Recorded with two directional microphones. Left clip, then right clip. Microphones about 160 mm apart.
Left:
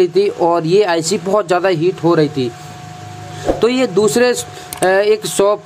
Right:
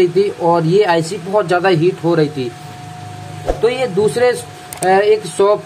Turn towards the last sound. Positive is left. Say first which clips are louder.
# right 1 dB
turn(degrees=40)  # may be behind; listen again after turning